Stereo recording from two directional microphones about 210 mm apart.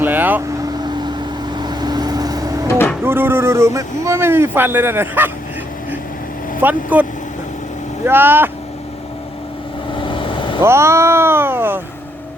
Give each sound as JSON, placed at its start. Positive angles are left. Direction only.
{"t": 0.0, "sound": "vehicle", "side_deg": -10}
{"t": 1.0, "sound": "vehicle", "side_deg": -20}
{"t": 2.6, "sound": "music", "side_deg": 10}
{"t": 3.0, "sound": "speech", "side_deg": -10}
{"t": 6.6, "sound": "speech", "side_deg": -10}
{"t": 9.9, "sound": "vehicle", "side_deg": 25}
{"t": 10.6, "sound": "speech", "side_deg": -10}